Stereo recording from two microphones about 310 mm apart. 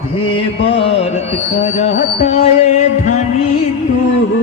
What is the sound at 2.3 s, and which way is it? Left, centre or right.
Speech, left.